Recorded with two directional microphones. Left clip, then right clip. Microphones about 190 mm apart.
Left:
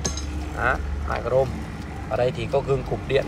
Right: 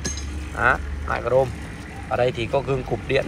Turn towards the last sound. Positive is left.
turn(degrees=5)  # may be behind; listen again after turning